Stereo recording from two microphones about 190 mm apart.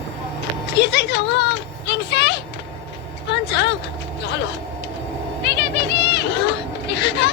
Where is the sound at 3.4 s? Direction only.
65° left (ahead or behind).